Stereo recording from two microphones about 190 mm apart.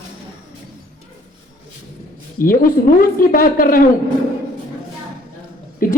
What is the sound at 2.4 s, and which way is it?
A woman's voice, 45° left (ahead or behind).